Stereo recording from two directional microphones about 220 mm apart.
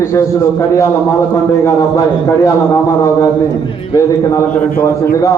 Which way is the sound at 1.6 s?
15° left (ahead or behind).